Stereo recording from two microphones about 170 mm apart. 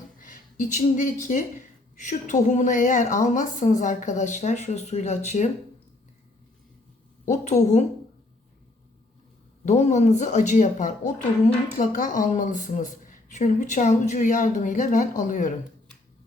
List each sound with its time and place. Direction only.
0.2 s speech: 50° left (ahead or behind)
7.3 s speech: 45° left (ahead or behind)
9.6 s speech: 40° left (ahead or behind)